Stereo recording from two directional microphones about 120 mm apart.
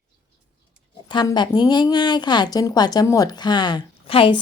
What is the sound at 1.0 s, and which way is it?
A woman's voice, 40° left (ahead or behind).